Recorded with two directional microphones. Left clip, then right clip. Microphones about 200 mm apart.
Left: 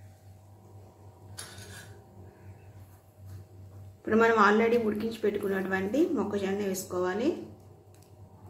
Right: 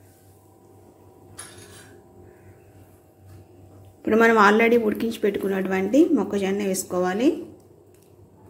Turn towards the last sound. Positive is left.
turn(degrees=-35)  # may be behind; listen again after turning